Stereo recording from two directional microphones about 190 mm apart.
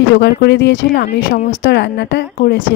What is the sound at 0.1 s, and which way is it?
A woman's voice, 65° left (ahead or behind).